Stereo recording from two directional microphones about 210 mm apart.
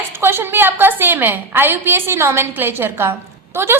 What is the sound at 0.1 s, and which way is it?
A woman's voice, 10° right (ahead or behind).